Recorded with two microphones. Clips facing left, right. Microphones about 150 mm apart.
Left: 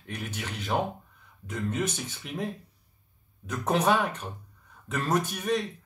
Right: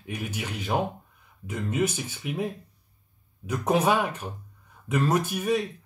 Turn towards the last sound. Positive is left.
turn(degrees=-10)  # may be behind; listen again after turning